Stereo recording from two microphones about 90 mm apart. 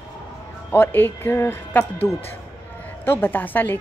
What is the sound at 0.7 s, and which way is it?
Speech, 25° left (ahead or behind).